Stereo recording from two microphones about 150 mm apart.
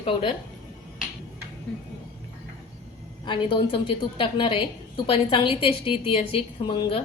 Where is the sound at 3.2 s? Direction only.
35° left (ahead or behind).